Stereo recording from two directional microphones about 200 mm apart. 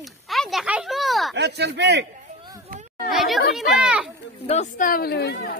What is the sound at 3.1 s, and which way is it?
Speech, centre (ahead or behind).